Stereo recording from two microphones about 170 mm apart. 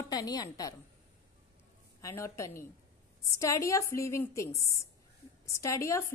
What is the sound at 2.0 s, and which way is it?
A woman's voice, 15° left (ahead or behind).